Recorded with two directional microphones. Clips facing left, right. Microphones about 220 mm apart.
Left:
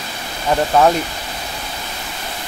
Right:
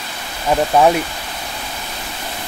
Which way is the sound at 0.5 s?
10° right (ahead or behind).